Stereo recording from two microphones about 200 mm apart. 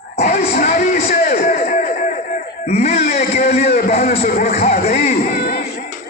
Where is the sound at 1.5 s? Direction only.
35° left (ahead or behind).